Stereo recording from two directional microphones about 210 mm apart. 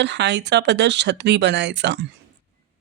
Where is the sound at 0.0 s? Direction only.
55° right (ahead or behind).